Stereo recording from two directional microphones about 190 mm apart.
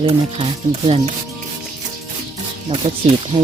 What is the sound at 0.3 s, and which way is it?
Speech, 35° right (ahead or behind).